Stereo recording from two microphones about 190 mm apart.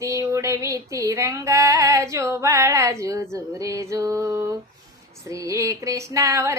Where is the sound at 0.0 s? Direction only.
15° right (ahead or behind).